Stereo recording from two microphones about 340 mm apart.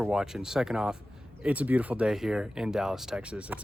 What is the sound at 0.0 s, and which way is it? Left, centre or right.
Speech, centre.